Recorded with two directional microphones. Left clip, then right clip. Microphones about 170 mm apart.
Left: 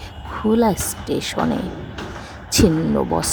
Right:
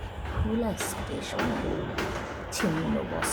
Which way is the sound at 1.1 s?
55° left (ahead or behind).